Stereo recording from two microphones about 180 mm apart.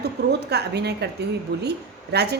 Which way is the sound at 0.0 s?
65° right (ahead or behind).